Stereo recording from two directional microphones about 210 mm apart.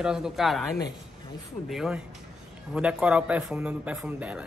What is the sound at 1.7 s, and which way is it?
A man's voice, 5° right (ahead or behind).